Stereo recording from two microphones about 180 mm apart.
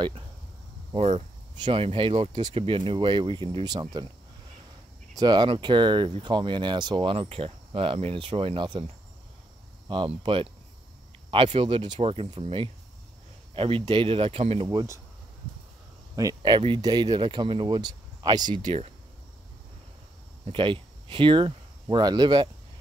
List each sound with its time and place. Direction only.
0.9 s speech: 35° right (ahead or behind)
5.1 s speech: 25° right (ahead or behind)
9.8 s speech: 30° right (ahead or behind)
14.7 s speech: 20° right (ahead or behind)
16.2 s speech: 20° right (ahead or behind)
18.6 s speech: 35° right (ahead or behind)
20.5 s speech: 30° right (ahead or behind)